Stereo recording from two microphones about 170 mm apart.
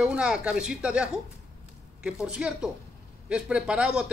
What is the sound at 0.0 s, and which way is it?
Speech, 5° right (ahead or behind).